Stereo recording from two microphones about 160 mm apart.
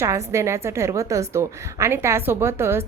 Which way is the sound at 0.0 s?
15° right (ahead or behind).